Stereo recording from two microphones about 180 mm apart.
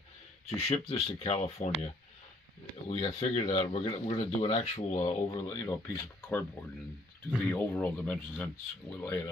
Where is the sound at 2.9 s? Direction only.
35° left (ahead or behind).